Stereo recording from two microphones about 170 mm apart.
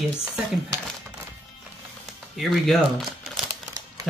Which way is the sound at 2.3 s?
Centre (ahead or behind).